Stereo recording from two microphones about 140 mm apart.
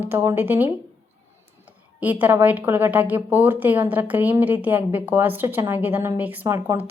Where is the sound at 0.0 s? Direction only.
15° right (ahead or behind).